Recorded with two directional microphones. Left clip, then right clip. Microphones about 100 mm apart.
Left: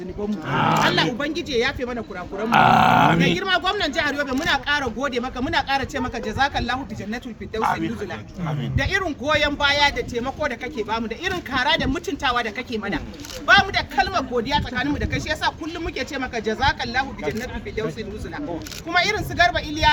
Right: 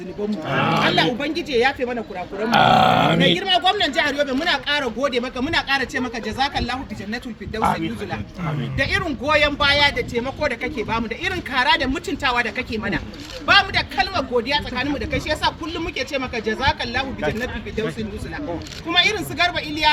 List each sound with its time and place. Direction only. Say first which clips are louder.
0.6 s speech: left 1 dB; 30° left (ahead or behind)
1.2 s speech: right 3 dB; 10° left (ahead or behind)
2.5 s speech: even; 35° left (ahead or behind)
3.3 s speech: right 3 dB; 5° left (ahead or behind)
8.8 s a man's voice: right 2 dB; 25° left (ahead or behind)
18.9 s a man's voice: right 2 dB; 20° left (ahead or behind)